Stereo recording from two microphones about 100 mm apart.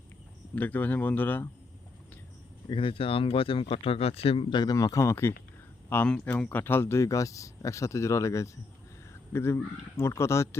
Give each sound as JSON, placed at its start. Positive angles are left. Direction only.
{"t": 0.5, "sound": "speech", "side_deg": 15}
{"t": 2.6, "sound": "speech", "side_deg": 60}
{"t": 6.1, "sound": "speech", "side_deg": 10}